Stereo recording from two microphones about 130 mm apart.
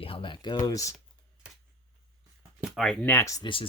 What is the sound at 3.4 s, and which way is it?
Speech, 40° left (ahead or behind).